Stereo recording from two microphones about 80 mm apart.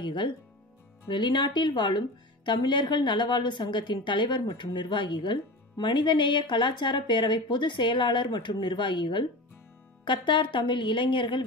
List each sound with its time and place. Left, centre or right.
0.0 s a woman's voice: left